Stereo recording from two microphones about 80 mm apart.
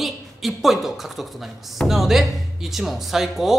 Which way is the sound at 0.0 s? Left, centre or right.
Centre.